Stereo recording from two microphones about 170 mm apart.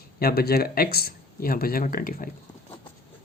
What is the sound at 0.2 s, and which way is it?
Speech, 65° left (ahead or behind).